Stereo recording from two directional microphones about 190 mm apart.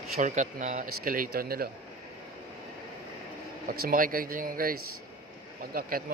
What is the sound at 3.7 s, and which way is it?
Speech, 50° right (ahead or behind).